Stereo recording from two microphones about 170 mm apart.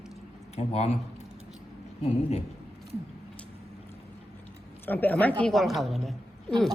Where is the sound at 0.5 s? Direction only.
40° left (ahead or behind).